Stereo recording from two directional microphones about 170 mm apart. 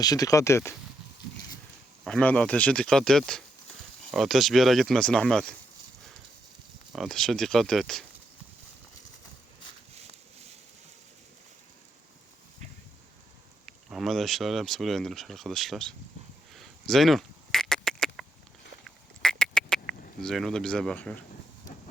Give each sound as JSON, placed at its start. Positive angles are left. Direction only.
{"t": 0.0, "sound": "speech", "side_deg": 20}
{"t": 2.0, "sound": "speech", "side_deg": 5}
{"t": 6.9, "sound": "speech", "side_deg": 0}
{"t": 9.9, "sound": "a sound", "side_deg": -40}
{"t": 13.7, "sound": "speech", "side_deg": 0}
{"t": 16.6, "sound": "duck", "side_deg": 0}